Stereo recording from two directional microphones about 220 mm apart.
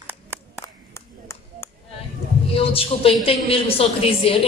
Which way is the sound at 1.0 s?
10° left (ahead or behind).